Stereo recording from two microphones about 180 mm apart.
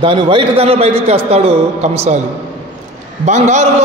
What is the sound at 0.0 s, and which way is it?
A man's voice, 25° right (ahead or behind).